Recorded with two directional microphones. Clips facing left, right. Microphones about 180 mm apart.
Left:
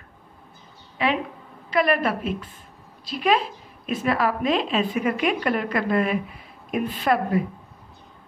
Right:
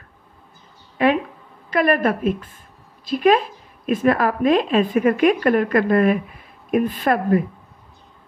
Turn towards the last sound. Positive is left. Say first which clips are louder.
# right 3 dB
turn(degrees=-50)  # may be behind; listen again after turning